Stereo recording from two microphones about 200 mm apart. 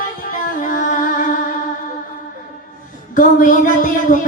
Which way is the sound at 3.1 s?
45° left (ahead or behind).